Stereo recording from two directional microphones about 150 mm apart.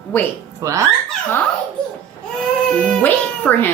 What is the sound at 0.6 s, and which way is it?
Speech, 20° right (ahead or behind).